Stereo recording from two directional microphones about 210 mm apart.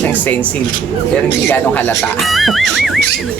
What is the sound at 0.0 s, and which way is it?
Speech, 10° left (ahead or behind).